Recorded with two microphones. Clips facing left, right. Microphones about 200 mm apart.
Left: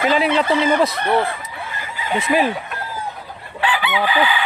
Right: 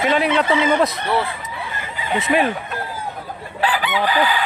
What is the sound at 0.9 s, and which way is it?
Speech, 55° left (ahead or behind).